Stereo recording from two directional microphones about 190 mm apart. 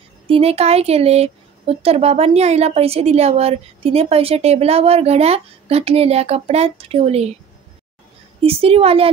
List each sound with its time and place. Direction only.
0.3 s speech: 30° right (ahead or behind)
8.4 s speech: 30° right (ahead or behind)